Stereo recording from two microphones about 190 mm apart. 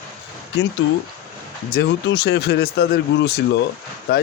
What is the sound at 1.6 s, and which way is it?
A man's voice, 55° left (ahead or behind).